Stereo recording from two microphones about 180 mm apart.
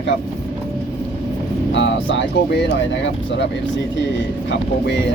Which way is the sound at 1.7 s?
85° left.